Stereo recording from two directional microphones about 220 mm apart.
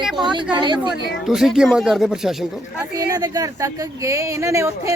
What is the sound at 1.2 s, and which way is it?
A woman's voice, centre (ahead or behind).